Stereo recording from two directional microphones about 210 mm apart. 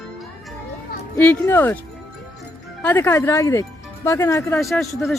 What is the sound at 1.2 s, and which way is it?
Speech, 10° left (ahead or behind).